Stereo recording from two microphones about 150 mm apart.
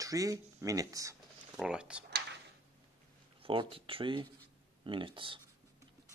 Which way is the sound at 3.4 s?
35° right (ahead or behind).